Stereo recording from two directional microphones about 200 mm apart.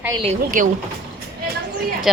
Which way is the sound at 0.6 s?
40° right (ahead or behind).